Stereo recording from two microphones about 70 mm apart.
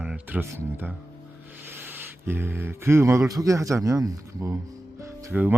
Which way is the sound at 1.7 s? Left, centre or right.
Right.